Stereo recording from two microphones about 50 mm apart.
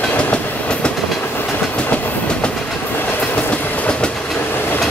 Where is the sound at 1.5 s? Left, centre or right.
Left.